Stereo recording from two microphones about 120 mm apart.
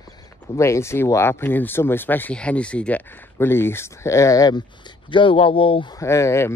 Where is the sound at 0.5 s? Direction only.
25° left (ahead or behind); by 5.9 s 50° left (ahead or behind).